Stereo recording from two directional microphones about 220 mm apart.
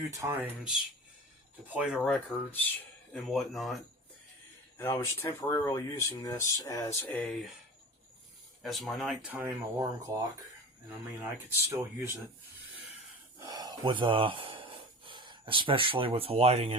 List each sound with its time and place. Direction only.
0.1 s speech: 15° right (ahead or behind)
4.8 s speech: 10° left (ahead or behind)
8.6 s speech: centre (ahead or behind)
13.4 s speech: 20° right (ahead or behind)